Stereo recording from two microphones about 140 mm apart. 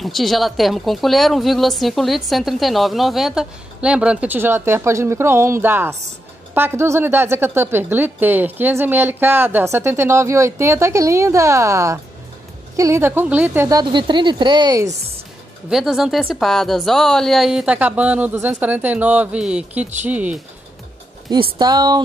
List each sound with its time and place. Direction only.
0.0 s a woman's voice: centre (ahead or behind); by 13.7 s 15° right (ahead or behind)
13.7 s speech: 35° right (ahead or behind)
15.7 s a woman's voice: centre (ahead or behind)
21.5 s speech: 30° right (ahead or behind)